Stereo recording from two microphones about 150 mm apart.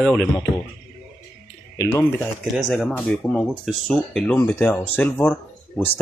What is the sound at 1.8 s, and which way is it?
Speech, 20° left (ahead or behind).